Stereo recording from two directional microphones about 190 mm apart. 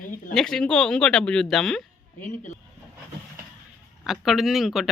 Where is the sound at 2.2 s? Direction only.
40° left (ahead or behind).